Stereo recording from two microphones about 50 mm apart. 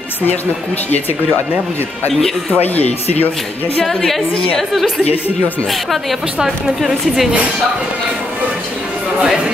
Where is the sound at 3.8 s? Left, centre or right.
Centre.